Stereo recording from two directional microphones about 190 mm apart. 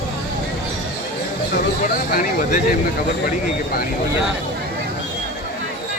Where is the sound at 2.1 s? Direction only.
45° left (ahead or behind).